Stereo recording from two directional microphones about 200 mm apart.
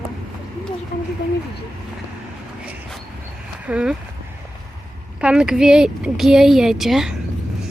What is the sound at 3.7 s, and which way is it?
Speech, 5° right (ahead or behind).